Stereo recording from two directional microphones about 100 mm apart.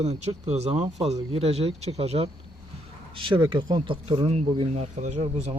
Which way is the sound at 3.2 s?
55° right (ahead or behind).